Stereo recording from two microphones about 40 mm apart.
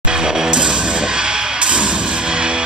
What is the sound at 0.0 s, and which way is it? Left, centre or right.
Music, centre.